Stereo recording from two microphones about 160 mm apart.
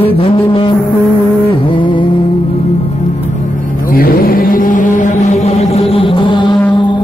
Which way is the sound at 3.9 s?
65° left (ahead or behind).